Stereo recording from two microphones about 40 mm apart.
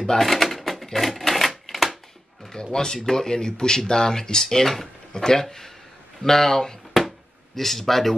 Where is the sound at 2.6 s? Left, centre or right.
Centre.